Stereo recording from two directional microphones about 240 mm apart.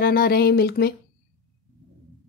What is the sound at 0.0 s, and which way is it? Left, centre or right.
Speech, left.